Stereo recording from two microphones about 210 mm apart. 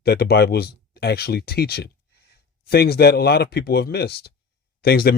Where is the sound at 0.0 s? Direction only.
50° left (ahead or behind).